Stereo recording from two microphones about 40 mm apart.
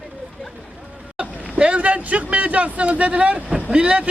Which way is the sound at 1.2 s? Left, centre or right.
Right.